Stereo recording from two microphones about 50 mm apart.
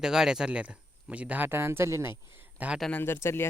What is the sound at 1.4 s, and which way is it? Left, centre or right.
Speech, right.